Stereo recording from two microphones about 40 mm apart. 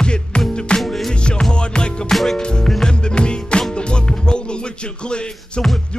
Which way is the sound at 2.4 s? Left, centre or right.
Left.